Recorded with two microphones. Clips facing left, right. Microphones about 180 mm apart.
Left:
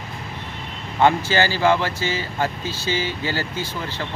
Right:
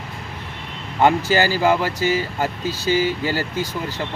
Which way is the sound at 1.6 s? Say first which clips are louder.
Right 1 dB; 10° right (ahead or behind).